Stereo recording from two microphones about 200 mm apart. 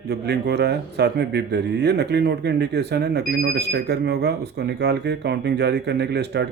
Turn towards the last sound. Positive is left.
turn(degrees=-55)  # may be behind; listen again after turning